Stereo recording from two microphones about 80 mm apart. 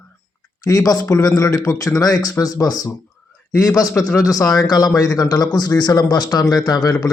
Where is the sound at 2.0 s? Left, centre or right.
Left.